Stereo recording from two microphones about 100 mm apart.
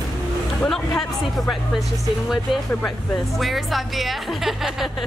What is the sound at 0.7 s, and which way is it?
Speech, centre (ahead or behind).